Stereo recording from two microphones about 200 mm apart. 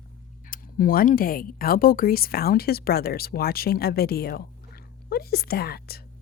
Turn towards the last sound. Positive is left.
turn(degrees=50)  # may be behind; listen again after turning